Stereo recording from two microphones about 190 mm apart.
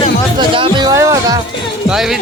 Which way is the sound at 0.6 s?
25° right (ahead or behind).